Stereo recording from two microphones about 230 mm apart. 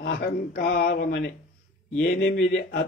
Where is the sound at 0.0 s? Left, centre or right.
Left.